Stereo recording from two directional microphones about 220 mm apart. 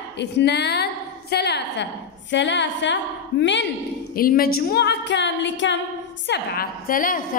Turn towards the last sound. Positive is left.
turn(degrees=40)  # may be behind; listen again after turning